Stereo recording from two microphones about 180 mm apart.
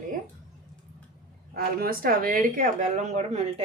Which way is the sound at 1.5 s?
55° right (ahead or behind).